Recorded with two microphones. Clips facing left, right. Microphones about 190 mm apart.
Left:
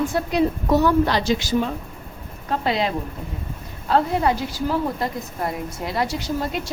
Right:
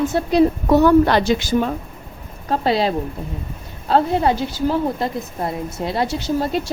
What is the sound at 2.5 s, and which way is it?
A woman's voice, 35° right (ahead or behind).